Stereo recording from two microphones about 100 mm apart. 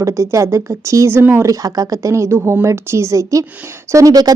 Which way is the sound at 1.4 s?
35° right (ahead or behind).